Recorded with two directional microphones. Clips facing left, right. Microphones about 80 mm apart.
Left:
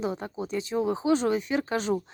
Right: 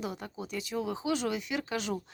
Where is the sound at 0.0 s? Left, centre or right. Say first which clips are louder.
Left 7 dB; left.